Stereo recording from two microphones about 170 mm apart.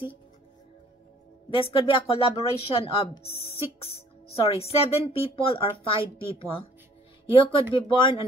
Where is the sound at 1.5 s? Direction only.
30° left (ahead or behind).